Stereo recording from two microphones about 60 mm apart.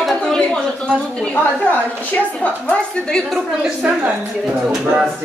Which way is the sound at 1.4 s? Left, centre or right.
Left.